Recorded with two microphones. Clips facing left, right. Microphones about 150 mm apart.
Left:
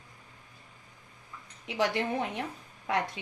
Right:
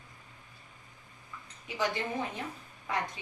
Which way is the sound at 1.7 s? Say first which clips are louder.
Left 4 dB; 70° left (ahead or behind).